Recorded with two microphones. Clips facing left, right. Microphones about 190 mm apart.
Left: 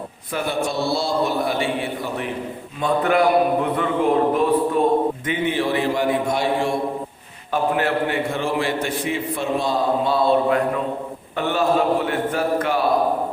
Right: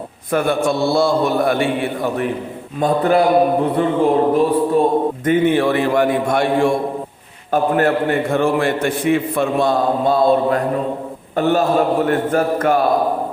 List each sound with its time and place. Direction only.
0.3 s a man's voice: 50° right (ahead or behind)
2.8 s a man's voice: 35° right (ahead or behind)
5.2 s a man's voice: 50° right (ahead or behind)